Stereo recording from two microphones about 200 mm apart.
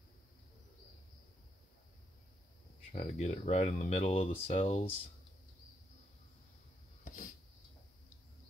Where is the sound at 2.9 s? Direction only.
35° left (ahead or behind).